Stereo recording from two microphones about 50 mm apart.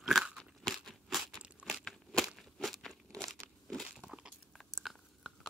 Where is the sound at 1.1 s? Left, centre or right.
Centre.